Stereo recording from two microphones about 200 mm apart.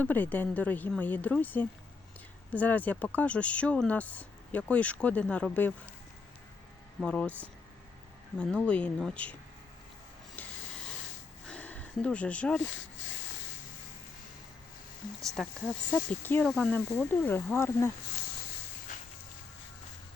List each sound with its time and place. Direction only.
0.0 s speech: 10° left (ahead or behind)
7.0 s speech: 5° left (ahead or behind)
8.4 s speech: 5° left (ahead or behind)
11.4 s a sound: 5° left (ahead or behind)
13.0 s a sound: 70° left (ahead or behind)
15.4 s speech: centre (ahead or behind)